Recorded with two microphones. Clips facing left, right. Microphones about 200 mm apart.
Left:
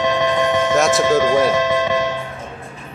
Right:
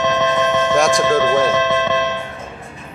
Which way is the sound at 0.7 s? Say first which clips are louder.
Right 1 dB; centre (ahead or behind).